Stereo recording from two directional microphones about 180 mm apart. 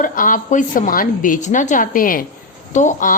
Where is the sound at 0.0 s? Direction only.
50° left (ahead or behind).